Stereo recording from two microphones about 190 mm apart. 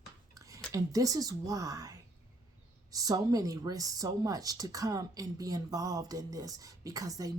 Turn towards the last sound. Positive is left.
turn(degrees=-20)  # may be behind; listen again after turning